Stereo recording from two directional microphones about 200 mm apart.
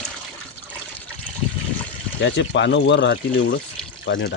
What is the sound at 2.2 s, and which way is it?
Speech, 65° left (ahead or behind).